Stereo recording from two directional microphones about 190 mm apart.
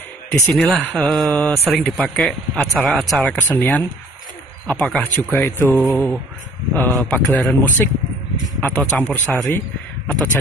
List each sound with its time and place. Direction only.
0.3 s a man's voice: 5° left (ahead or behind)